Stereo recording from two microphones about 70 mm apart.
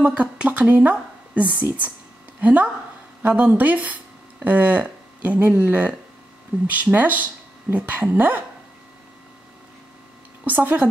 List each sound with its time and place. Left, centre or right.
0.0 s a woman's voice: right
10.4 s a woman's voice: right